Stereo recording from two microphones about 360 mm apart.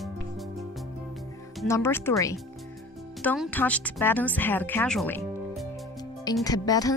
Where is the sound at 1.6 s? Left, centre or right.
Centre.